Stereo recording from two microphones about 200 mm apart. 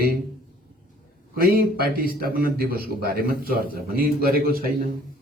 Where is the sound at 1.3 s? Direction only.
45° right (ahead or behind).